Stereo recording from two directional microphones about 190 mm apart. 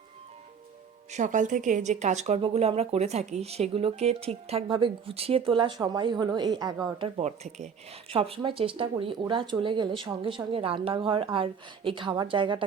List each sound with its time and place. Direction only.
1.1 s a woman's voice: 40° right (ahead or behind); by 7.1 s 20° right (ahead or behind)
7.2 s a woman's voice: 35° right (ahead or behind)